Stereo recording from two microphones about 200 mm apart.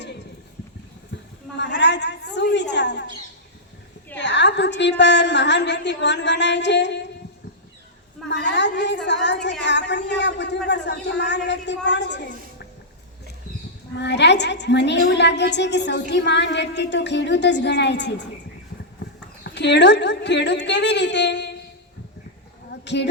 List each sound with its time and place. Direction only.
1.5 s a woman's voice: 60° left (ahead or behind)
4.2 s a woman's voice: 60° left (ahead or behind)
8.3 s a woman's voice: 60° left (ahead or behind)
13.9 s a woman's voice: 60° left (ahead or behind)
19.5 s a woman's voice: 60° left (ahead or behind)
22.7 s a sound: 60° left (ahead or behind)